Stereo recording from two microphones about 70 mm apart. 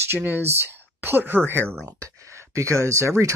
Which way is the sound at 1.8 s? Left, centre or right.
Right.